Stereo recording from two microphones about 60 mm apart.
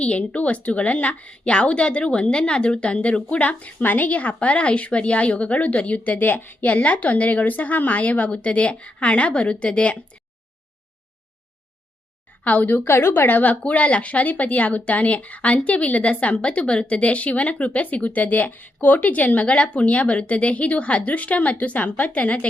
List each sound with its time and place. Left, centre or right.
0.0 s a woman's voice: left
12.5 s a woman's voice: left